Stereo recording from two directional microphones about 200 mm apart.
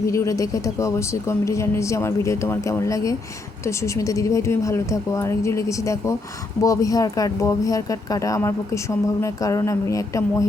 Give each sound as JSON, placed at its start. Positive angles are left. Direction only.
{"t": 0.1, "sound": "speech", "side_deg": 15}